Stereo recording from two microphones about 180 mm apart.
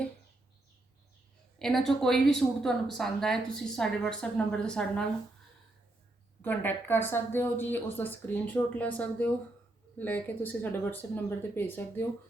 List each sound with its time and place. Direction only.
1.5 s speech: centre (ahead or behind)
6.4 s a woman's voice: 10° left (ahead or behind)